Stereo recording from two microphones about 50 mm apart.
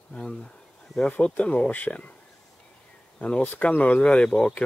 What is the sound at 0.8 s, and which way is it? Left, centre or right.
Speech, centre.